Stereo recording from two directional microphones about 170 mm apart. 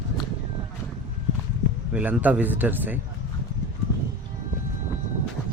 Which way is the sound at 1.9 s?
5° right (ahead or behind).